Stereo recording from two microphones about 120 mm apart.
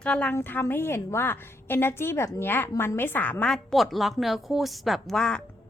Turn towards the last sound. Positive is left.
turn(degrees=5)  # may be behind; listen again after turning